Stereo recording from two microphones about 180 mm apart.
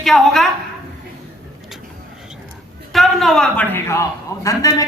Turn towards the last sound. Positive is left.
turn(degrees=20)  # may be behind; listen again after turning